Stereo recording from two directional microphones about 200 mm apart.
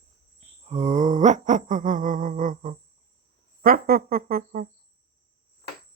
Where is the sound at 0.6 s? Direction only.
35° right (ahead or behind).